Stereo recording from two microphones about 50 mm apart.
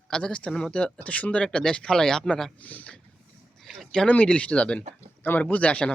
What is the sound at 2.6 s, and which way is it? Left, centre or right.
Speech, left.